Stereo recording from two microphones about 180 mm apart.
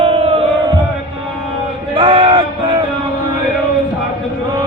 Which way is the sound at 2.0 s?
30° right (ahead or behind).